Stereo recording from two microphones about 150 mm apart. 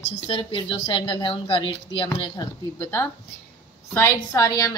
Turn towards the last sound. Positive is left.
turn(degrees=20)  # may be behind; listen again after turning